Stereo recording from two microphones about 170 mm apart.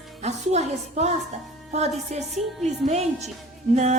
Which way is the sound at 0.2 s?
40° right (ahead or behind).